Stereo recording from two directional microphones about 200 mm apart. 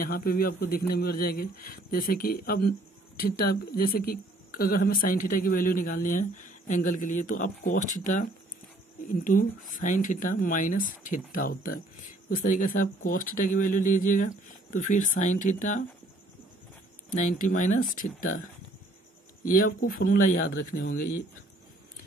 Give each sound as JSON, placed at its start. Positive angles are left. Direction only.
{"t": 0.0, "sound": "speech", "side_deg": 45}
{"t": 17.1, "sound": "speech", "side_deg": 40}
{"t": 19.4, "sound": "speech", "side_deg": 45}